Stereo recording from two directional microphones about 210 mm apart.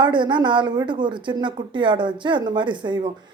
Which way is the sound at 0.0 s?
20° right (ahead or behind).